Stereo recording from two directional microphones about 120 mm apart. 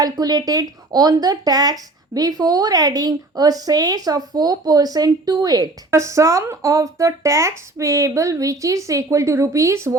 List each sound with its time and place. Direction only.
0.0 s speech: 30° right (ahead or behind)